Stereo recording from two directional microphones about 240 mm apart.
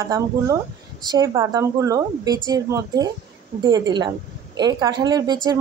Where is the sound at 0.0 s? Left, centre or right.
Centre.